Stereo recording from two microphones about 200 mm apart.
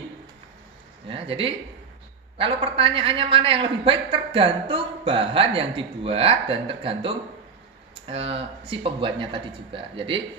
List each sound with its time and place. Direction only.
1.0 s a man's voice: 25° right (ahead or behind)